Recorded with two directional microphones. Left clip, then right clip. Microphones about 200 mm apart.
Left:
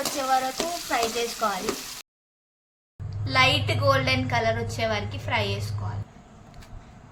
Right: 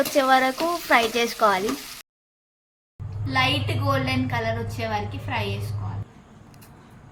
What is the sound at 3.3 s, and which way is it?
A woman's voice, 60° left (ahead or behind).